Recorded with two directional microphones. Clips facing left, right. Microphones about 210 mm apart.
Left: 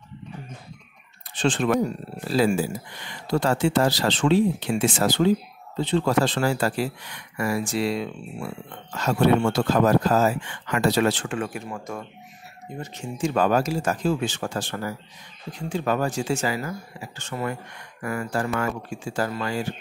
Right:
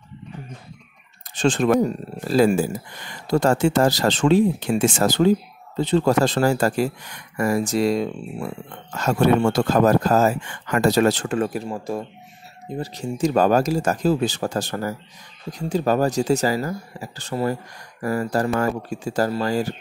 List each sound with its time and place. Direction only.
1.3 s speech: 45° right (ahead or behind)